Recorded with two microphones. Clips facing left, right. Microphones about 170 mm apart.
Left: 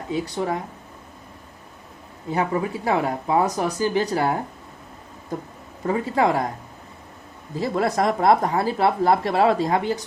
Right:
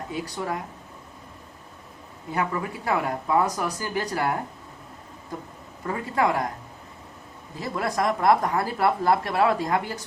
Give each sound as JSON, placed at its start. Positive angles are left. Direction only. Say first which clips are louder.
{"t": 0.1, "sound": "speech", "louder": "left 7 dB", "side_deg": 25}
{"t": 2.3, "sound": "speech", "louder": "left 4 dB", "side_deg": 25}
{"t": 5.8, "sound": "speech", "louder": "left 4 dB", "side_deg": 25}
{"t": 7.6, "sound": "speech", "louder": "left 5 dB", "side_deg": 25}